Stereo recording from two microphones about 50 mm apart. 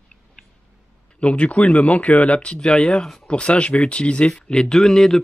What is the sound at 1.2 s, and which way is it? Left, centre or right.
Speech, left.